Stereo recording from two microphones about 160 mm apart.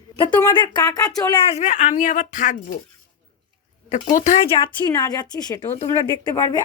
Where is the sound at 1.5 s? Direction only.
50° left (ahead or behind).